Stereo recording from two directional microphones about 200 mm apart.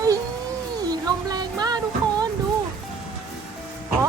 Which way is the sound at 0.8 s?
20° right (ahead or behind).